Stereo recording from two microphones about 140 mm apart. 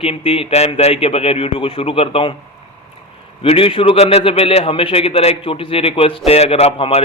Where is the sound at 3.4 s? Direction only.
40° left (ahead or behind).